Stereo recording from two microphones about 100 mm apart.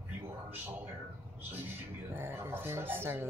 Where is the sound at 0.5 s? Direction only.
15° right (ahead or behind).